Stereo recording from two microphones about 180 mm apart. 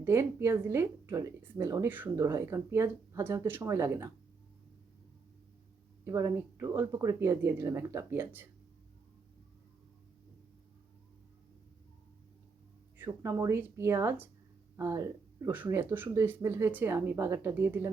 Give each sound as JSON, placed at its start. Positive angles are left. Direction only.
{"t": 0.0, "sound": "a woman's voice", "side_deg": -15}
{"t": 6.1, "sound": "a woman's voice", "side_deg": -15}
{"t": 13.1, "sound": "a woman's voice", "side_deg": -15}